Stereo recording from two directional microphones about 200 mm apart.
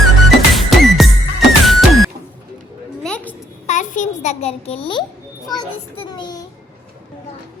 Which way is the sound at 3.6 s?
40° left (ahead or behind).